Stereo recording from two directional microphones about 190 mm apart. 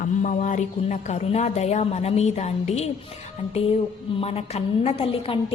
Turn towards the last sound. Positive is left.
turn(degrees=30)  # may be behind; listen again after turning